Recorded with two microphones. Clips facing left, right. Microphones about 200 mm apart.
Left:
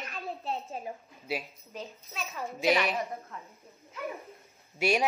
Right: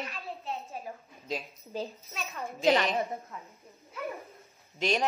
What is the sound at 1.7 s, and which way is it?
Speech, 30° right (ahead or behind).